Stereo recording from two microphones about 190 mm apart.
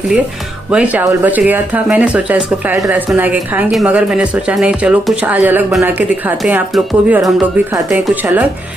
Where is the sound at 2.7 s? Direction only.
15° right (ahead or behind).